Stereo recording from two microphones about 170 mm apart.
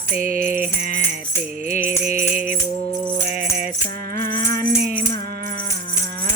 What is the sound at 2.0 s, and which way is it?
Music, 60° right (ahead or behind).